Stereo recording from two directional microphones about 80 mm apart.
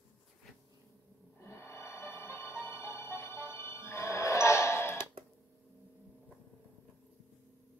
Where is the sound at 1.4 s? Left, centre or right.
Left.